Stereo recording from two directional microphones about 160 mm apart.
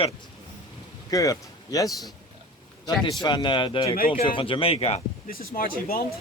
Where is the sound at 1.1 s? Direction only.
20° left (ahead or behind).